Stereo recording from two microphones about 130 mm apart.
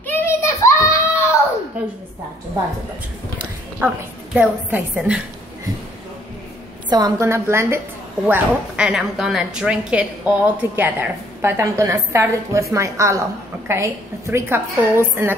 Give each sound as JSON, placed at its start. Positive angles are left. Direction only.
{"t": 0.0, "sound": "a sound", "side_deg": 15}
{"t": 3.8, "sound": "a woman's voice", "side_deg": -15}
{"t": 6.9, "sound": "a woman's voice", "side_deg": -25}
{"t": 8.3, "sound": "a woman's voice", "side_deg": -10}